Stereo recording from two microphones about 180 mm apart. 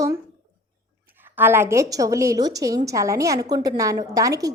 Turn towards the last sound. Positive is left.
turn(degrees=-20)  # may be behind; listen again after turning